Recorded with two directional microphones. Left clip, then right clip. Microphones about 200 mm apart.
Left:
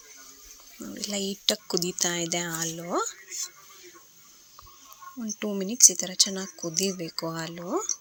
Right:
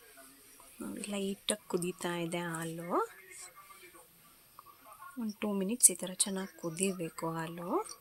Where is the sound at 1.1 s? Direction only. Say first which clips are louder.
Left 9 dB; 20° left (ahead or behind).